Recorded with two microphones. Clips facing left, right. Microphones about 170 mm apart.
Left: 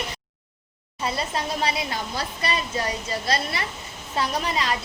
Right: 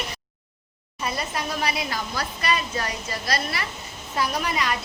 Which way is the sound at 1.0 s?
25° left (ahead or behind).